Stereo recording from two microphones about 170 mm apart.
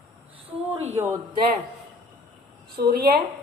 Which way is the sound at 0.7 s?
40° right (ahead or behind).